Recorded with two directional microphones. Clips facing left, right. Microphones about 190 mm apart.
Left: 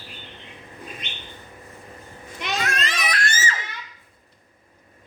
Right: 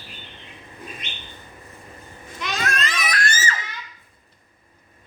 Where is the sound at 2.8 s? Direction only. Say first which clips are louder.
Right 1 dB; 30° left (ahead or behind).